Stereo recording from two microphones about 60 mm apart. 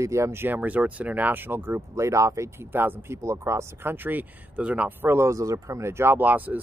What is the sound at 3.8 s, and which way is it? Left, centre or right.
Speech, right.